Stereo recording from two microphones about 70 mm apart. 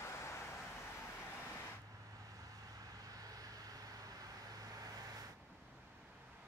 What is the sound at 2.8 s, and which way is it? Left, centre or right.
Vehicle, right.